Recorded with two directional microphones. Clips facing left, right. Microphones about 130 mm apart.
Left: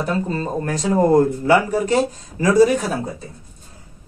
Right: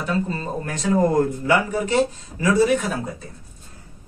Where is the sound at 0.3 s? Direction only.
40° left (ahead or behind).